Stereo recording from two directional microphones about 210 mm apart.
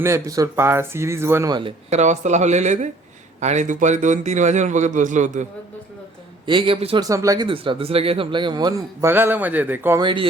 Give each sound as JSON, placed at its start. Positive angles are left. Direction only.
{"t": 0.0, "sound": "speech", "side_deg": -15}
{"t": 1.9, "sound": "a man's voice", "side_deg": -35}
{"t": 6.4, "sound": "speech", "side_deg": -25}
{"t": 10.0, "sound": "speech", "side_deg": -25}